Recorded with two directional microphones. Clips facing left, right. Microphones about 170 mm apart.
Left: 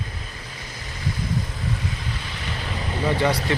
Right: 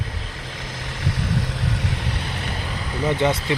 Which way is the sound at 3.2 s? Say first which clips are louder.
Right 1 dB; 20° right (ahead or behind).